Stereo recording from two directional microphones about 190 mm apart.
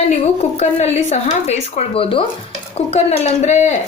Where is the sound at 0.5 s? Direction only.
35° left (ahead or behind).